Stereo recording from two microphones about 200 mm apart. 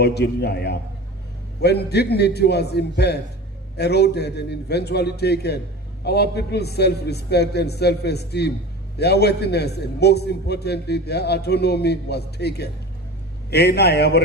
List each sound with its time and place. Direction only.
0.0 s a man's voice: 55° left (ahead or behind)